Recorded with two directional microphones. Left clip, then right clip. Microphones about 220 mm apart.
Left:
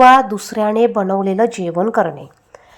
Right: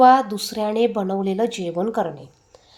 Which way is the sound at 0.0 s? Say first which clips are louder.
Left 5 dB; 15° left (ahead or behind).